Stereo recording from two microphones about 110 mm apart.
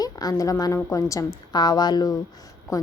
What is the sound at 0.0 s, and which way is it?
A woman's voice, 35° left (ahead or behind).